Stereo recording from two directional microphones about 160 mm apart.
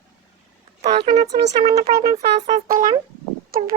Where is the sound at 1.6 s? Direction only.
40° right (ahead or behind).